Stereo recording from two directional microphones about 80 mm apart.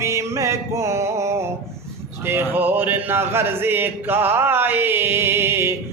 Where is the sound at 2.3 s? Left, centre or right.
Right.